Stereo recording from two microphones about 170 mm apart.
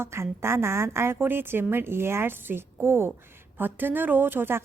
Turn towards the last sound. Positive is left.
turn(degrees=-15)  # may be behind; listen again after turning